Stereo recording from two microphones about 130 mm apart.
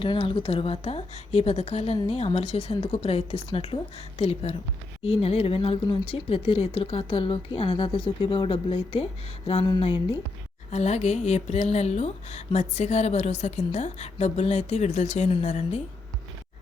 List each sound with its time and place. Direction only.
0.0 s speech: 45° left (ahead or behind)
10.7 s speech: 60° left (ahead or behind)